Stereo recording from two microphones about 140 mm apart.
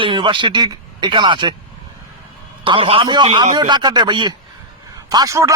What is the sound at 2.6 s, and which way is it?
A man's voice, 40° right (ahead or behind).